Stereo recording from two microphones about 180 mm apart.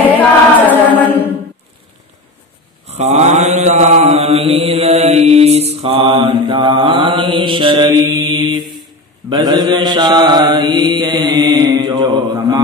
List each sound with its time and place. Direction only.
0.6 s choir: 10° left (ahead or behind)
2.9 s mantra: 40° right (ahead or behind); by 12.5 s 20° right (ahead or behind)